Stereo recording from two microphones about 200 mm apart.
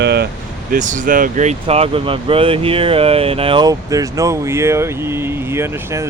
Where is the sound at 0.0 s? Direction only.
55° right (ahead or behind).